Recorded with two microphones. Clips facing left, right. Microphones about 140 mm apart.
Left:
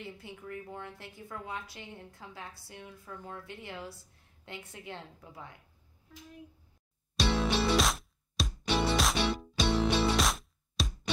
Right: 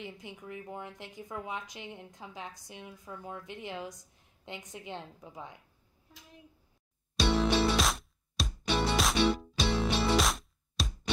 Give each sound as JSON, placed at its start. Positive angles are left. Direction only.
{"t": 0.0, "sound": "a woman's voice", "side_deg": -15}
{"t": 7.2, "sound": "music", "side_deg": 0}